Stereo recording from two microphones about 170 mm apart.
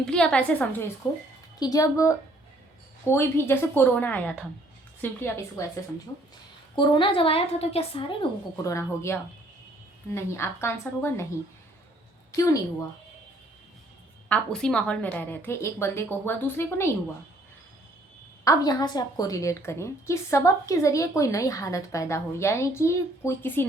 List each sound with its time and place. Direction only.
0.0 s a woman's voice: 5° left (ahead or behind)
1.5 s a woman's voice: 20° left (ahead or behind)
6.7 s a woman's voice: 30° left (ahead or behind)
8.6 s a woman's voice: 15° left (ahead or behind)
10.2 s a woman's voice: 15° left (ahead or behind)
12.4 s a woman's voice: 20° left (ahead or behind)
14.3 s a woman's voice: 5° left (ahead or behind)
18.4 s a woman's voice: 20° left (ahead or behind)